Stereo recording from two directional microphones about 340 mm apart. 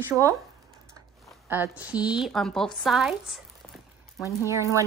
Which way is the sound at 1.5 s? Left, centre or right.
Centre.